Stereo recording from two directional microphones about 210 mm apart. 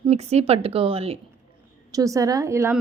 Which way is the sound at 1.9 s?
15° right (ahead or behind).